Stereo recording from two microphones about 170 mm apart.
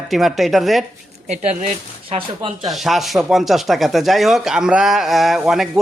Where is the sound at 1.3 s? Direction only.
40° right (ahead or behind).